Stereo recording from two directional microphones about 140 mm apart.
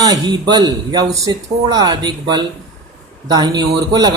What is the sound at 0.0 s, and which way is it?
Speech, 30° right (ahead or behind).